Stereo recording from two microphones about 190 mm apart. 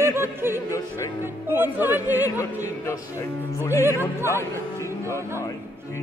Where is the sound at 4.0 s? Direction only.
15° right (ahead or behind).